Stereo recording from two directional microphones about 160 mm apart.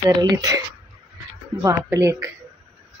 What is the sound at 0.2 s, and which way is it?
Speech, 20° right (ahead or behind).